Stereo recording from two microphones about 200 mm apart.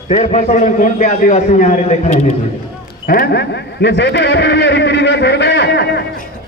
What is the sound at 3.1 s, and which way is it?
Speech, 50° left (ahead or behind).